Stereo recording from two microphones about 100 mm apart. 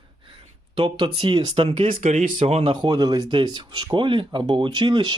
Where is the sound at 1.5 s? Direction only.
65° right (ahead or behind).